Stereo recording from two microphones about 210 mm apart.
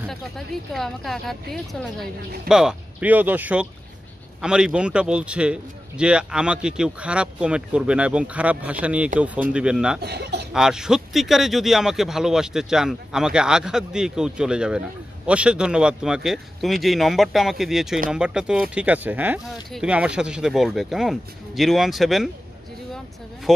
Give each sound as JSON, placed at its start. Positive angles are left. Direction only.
{"t": 0.7, "sound": "a man's voice", "side_deg": 0}
{"t": 10.0, "sound": "speech", "side_deg": -50}
{"t": 10.5, "sound": "a man's voice", "side_deg": -5}